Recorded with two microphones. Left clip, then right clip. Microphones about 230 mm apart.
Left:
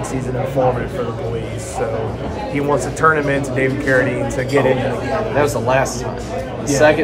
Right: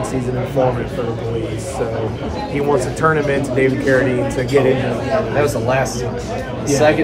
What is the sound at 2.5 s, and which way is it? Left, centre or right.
Speech, centre.